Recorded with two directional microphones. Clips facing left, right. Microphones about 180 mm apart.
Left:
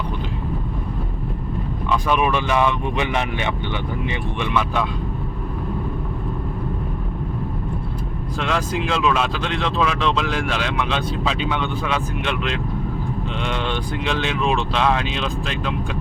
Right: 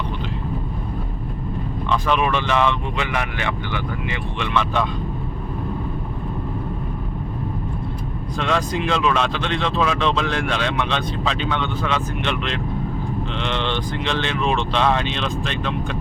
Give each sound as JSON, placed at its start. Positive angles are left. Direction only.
{"t": 1.9, "sound": "speech", "side_deg": 10}
{"t": 3.1, "sound": "speech", "side_deg": 25}
{"t": 4.5, "sound": "speech", "side_deg": 5}
{"t": 8.4, "sound": "speech", "side_deg": 5}